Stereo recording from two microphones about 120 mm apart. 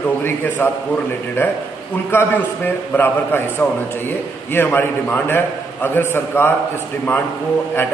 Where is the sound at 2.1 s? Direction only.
15° left (ahead or behind).